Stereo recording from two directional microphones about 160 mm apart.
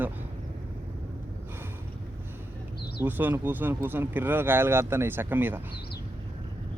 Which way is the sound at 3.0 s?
10° right (ahead or behind).